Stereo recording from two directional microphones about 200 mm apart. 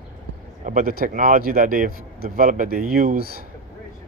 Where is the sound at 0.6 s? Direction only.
45° right (ahead or behind).